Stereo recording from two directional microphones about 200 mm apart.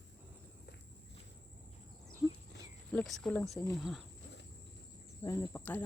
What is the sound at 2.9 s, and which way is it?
Speech, 5° left (ahead or behind).